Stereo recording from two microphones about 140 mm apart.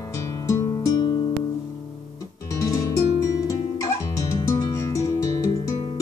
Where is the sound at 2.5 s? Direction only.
25° left (ahead or behind).